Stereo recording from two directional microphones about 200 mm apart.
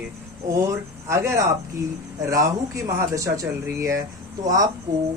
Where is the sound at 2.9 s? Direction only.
15° right (ahead or behind).